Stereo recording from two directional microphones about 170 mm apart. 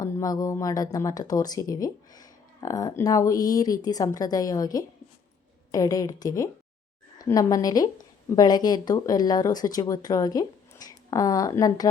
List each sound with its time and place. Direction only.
0.0 s speech: 20° left (ahead or behind)